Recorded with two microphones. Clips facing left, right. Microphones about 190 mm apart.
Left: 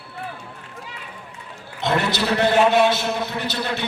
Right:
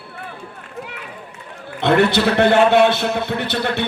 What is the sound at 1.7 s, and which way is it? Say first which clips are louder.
A man's voice: right 7 dB; 60° right (ahead or behind).